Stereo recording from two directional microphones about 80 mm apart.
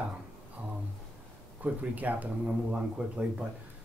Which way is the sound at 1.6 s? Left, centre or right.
Centre.